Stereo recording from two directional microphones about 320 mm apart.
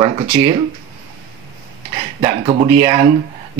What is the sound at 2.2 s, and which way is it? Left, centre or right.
Speech, centre.